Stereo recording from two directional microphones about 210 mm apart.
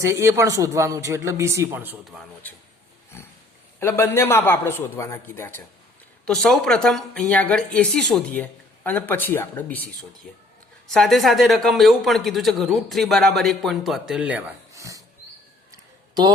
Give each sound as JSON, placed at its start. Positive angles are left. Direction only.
{"t": 0.0, "sound": "a man's voice", "side_deg": -15}
{"t": 3.1, "sound": "wild animals", "side_deg": 10}
{"t": 3.8, "sound": "speech", "side_deg": 10}
{"t": 15.7, "sound": "a sound", "side_deg": -20}